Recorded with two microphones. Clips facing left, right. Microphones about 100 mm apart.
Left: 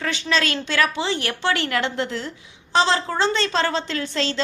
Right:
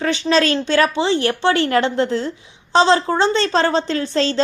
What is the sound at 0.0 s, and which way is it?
A woman's voice, 35° right (ahead or behind).